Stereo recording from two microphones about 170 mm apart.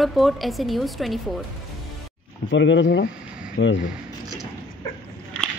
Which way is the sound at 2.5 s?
90° left.